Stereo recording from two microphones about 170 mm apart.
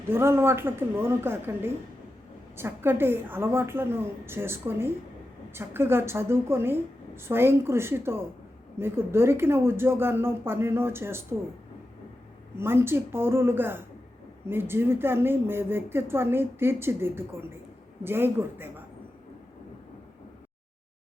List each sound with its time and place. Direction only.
0.1 s speech: 15° right (ahead or behind)
12.5 s speech: 15° right (ahead or behind)